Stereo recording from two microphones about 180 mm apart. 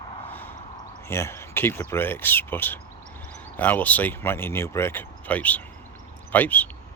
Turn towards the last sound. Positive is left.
turn(degrees=10)  # may be behind; listen again after turning